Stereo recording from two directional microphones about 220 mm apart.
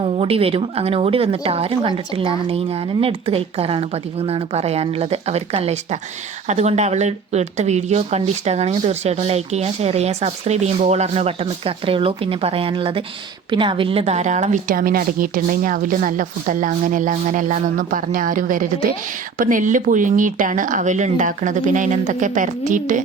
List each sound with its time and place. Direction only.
0.0 s a woman's voice: 25° right (ahead or behind)